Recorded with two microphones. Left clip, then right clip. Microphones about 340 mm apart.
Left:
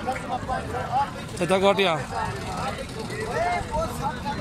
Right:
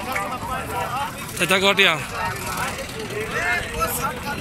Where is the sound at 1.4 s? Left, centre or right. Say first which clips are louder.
Right 3 dB; centre.